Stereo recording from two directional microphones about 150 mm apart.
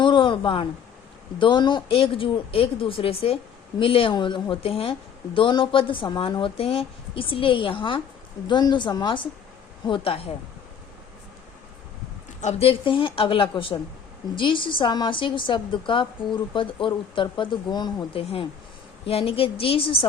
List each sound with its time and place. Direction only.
0.0 s a sound: 35° left (ahead or behind)
1.4 s a woman's voice: 30° left (ahead or behind)
12.4 s a woman's voice: 45° left (ahead or behind)